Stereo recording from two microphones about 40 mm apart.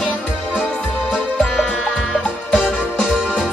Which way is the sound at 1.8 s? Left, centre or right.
Centre.